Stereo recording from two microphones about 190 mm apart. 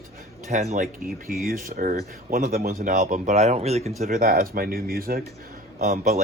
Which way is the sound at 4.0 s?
45° right (ahead or behind).